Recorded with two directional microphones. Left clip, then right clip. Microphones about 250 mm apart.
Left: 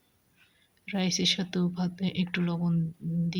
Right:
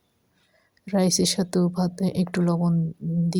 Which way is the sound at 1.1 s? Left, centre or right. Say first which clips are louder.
Right 3 dB; right.